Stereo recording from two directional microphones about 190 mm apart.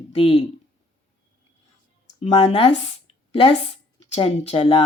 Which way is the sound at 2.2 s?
35° left (ahead or behind).